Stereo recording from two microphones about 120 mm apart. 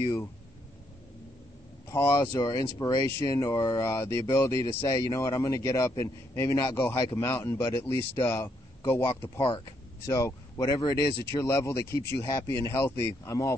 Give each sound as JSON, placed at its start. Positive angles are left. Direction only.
{"t": 1.9, "sound": "a man's voice", "side_deg": 25}
{"t": 9.2, "sound": "speech", "side_deg": 40}
{"t": 10.0, "sound": "speech", "side_deg": 25}